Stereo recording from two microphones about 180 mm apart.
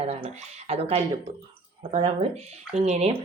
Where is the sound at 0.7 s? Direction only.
35° right (ahead or behind).